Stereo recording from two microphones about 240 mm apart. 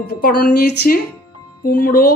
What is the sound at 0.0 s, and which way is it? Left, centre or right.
Speech, left.